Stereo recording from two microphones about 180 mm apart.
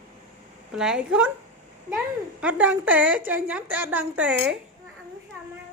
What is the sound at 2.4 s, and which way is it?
Speech, 10° right (ahead or behind).